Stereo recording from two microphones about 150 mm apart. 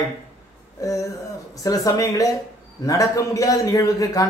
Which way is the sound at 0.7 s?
20° left (ahead or behind).